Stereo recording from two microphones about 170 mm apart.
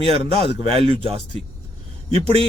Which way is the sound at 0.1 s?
35° right (ahead or behind).